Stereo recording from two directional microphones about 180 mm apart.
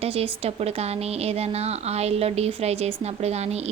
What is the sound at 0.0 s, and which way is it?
A woman's voice, 35° right (ahead or behind).